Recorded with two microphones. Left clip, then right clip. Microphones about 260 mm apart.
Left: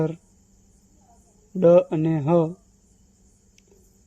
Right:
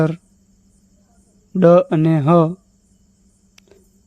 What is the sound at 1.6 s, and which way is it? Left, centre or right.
Speech, right.